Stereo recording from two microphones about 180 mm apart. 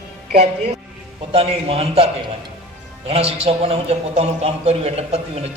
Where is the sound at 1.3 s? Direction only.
35° right (ahead or behind).